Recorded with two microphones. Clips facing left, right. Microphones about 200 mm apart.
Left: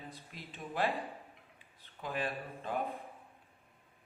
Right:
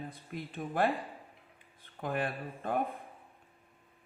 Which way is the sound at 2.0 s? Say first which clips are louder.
Right 3 dB; 55° right (ahead or behind).